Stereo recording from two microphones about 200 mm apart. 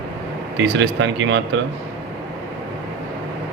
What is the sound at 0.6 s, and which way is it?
Speech, 65° right (ahead or behind).